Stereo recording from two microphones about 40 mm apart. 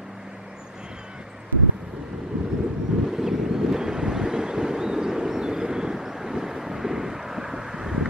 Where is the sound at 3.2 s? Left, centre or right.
Centre.